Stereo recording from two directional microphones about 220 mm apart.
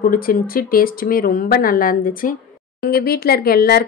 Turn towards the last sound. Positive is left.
turn(degrees=45)  # may be behind; listen again after turning